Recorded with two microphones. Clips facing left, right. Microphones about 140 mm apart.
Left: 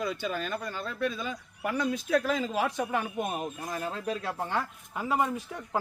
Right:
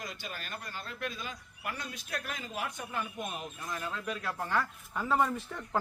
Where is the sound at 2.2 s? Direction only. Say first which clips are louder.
Left 10 dB; 90° left.